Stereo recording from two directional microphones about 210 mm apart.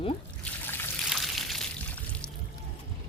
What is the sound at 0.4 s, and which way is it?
Trickle, 10° left (ahead or behind).